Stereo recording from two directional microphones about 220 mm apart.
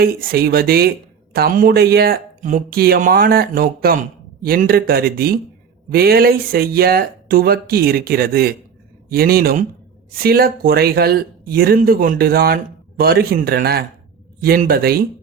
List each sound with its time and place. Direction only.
0.0 s speech: 45° right (ahead or behind)